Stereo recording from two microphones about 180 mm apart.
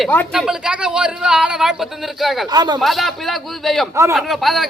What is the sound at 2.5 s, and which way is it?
Speech, 25° right (ahead or behind).